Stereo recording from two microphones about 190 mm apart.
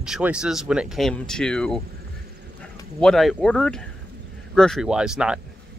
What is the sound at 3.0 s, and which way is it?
Speech, centre (ahead or behind).